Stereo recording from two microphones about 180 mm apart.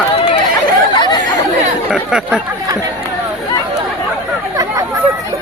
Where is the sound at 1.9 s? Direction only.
5° right (ahead or behind).